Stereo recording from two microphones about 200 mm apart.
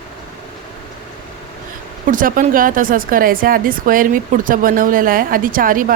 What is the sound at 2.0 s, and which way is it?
Speech, 40° right (ahead or behind).